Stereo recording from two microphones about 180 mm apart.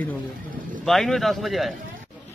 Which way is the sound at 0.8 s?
Centre (ahead or behind).